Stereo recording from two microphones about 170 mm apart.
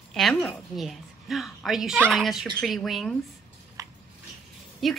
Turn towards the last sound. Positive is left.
turn(degrees=0)  # may be behind; listen again after turning